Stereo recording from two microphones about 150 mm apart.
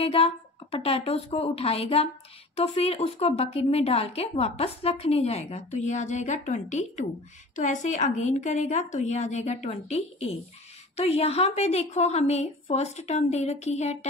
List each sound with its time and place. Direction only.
0.0 s a woman's voice: 40° left (ahead or behind)